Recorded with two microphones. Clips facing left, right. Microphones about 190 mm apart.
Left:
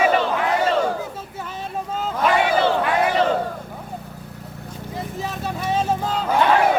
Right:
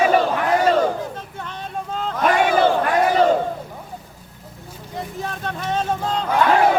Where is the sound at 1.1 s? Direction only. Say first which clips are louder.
Left 1 dB; 5° left (ahead or behind).